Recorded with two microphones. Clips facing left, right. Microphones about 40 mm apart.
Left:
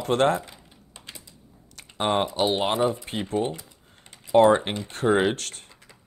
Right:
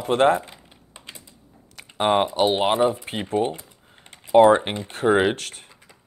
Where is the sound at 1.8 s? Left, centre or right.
Centre.